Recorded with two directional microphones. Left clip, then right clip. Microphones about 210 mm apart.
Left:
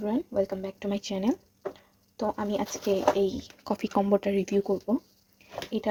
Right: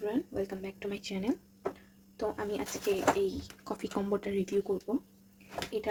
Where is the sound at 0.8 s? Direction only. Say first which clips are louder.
Left 5 dB; 40° left (ahead or behind).